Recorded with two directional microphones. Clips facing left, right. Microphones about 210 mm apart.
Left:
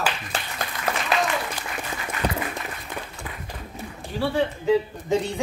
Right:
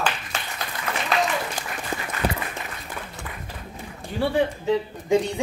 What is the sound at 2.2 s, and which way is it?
Applause, 10° right (ahead or behind).